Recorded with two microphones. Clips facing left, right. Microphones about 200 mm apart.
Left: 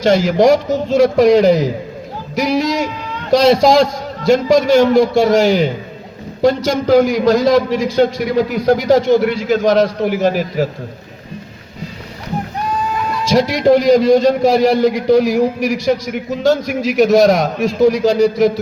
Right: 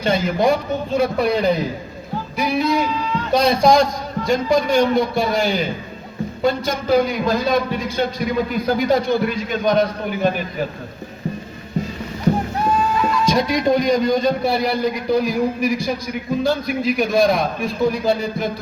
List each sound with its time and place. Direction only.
0.0 s a man's voice: 85° left
13.5 s a man's voice: 90° left